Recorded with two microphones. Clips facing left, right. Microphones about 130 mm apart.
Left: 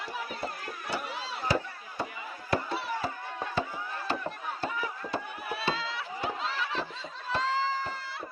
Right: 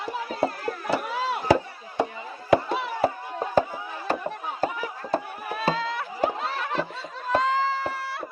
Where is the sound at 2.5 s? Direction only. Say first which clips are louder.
Right 9 dB; 90° right.